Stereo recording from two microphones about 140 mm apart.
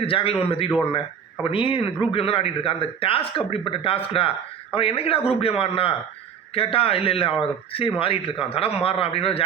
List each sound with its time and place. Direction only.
0.0 s a man's voice: 40° left (ahead or behind)